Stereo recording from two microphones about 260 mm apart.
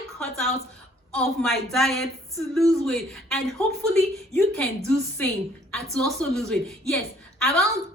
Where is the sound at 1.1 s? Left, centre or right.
Centre.